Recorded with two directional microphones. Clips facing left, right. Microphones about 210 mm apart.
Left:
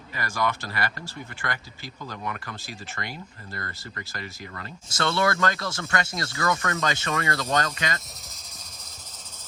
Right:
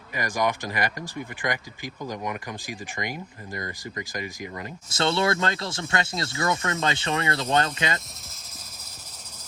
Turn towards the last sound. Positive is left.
turn(degrees=-25)  # may be behind; listen again after turning